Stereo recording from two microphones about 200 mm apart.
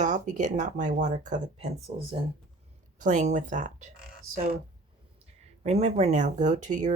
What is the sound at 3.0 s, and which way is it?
Speech, 40° right (ahead or behind).